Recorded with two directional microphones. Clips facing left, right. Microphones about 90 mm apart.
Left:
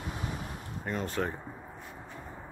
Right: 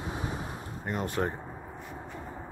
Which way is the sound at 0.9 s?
15° right (ahead or behind).